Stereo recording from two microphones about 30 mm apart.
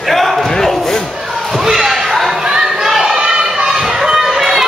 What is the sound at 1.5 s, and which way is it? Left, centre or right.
Slam, centre.